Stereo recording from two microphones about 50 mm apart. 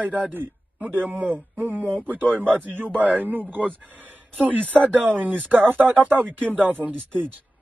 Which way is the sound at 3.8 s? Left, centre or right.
Right.